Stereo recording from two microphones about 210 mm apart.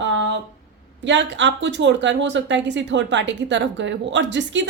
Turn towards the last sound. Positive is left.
turn(degrees=-60)  # may be behind; listen again after turning